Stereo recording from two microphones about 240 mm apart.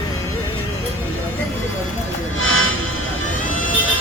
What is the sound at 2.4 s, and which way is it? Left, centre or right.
Music, left.